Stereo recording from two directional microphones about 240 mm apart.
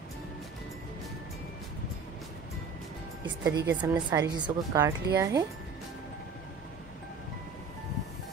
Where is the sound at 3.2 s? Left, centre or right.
Centre.